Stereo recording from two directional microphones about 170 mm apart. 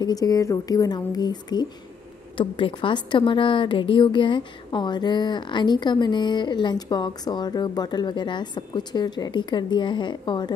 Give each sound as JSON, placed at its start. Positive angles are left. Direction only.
{"t": 0.0, "sound": "a woman's voice", "side_deg": 20}